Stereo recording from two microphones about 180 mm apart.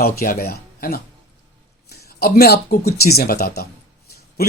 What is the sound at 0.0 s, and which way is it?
Speech, 60° left (ahead or behind).